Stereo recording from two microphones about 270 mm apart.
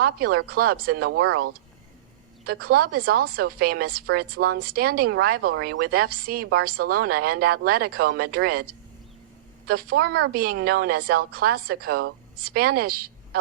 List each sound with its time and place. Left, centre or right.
0.0 s a woman's voice: right
2.5 s a woman's voice: right